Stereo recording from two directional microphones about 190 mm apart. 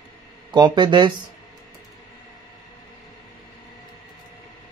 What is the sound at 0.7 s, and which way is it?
Speech, 25° right (ahead or behind).